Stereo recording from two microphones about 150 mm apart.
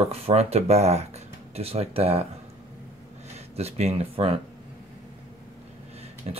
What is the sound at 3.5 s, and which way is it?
Speech, 45° right (ahead or behind).